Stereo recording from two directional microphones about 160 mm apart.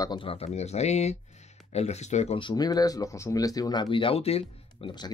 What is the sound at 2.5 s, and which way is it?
Speech, 25° left (ahead or behind).